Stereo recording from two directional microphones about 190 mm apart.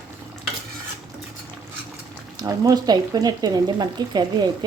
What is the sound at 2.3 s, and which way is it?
Speech, 20° right (ahead or behind).